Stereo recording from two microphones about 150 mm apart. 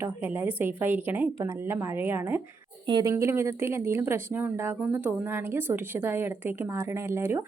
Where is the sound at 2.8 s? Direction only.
25° right (ahead or behind).